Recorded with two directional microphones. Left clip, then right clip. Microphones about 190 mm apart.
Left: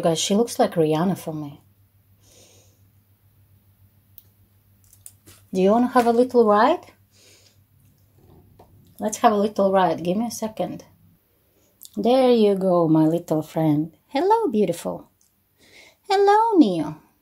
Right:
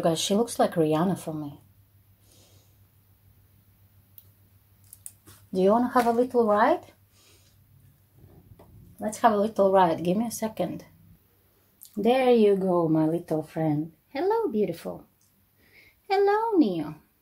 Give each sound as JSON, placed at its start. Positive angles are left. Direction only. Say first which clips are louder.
{"t": 0.0, "sound": "speech", "louder": "left 4 dB", "side_deg": 10}
{"t": 5.5, "sound": "speech", "louder": "left 3 dB", "side_deg": 15}
{"t": 6.3, "sound": "speech", "louder": "left 5 dB", "side_deg": 30}
{"t": 8.9, "sound": "a woman's voice", "louder": "left 4 dB", "side_deg": 20}